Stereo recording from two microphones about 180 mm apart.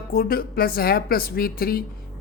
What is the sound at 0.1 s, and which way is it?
A woman's voice, 55° left (ahead or behind).